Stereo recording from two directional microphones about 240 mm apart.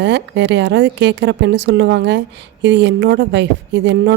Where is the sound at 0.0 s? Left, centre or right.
Right.